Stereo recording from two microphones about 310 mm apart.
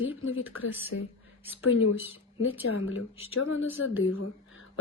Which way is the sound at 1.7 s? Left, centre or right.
Left.